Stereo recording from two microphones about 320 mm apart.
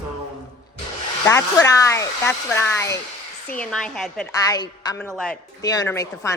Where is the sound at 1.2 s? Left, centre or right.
Centre.